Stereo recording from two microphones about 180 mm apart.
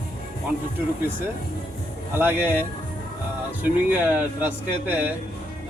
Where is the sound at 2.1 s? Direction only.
10° right (ahead or behind).